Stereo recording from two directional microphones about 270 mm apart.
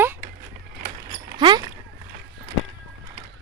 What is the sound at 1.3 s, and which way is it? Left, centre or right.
Speech, centre.